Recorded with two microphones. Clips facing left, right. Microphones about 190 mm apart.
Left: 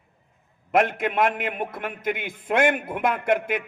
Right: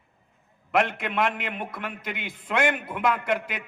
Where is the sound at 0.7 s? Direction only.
45° left (ahead or behind).